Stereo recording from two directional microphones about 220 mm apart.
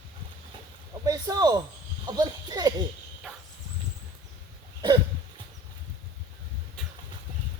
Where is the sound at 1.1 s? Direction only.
15° right (ahead or behind).